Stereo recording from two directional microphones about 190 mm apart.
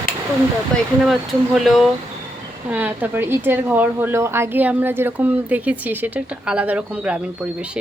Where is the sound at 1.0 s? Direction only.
Centre (ahead or behind).